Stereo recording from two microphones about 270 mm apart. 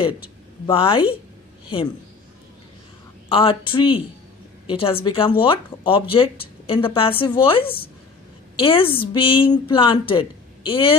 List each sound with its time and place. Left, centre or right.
0.7 s a woman's voice: centre
3.3 s a woman's voice: centre
7.6 s speech: centre
8.5 s a woman's voice: centre